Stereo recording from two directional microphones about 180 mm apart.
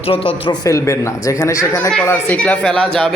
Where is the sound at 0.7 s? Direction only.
15° left (ahead or behind).